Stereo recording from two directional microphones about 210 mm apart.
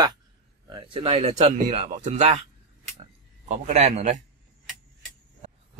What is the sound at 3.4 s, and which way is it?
Speech, 30° right (ahead or behind).